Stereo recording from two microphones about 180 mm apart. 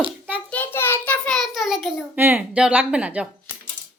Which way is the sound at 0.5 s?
10° left (ahead or behind).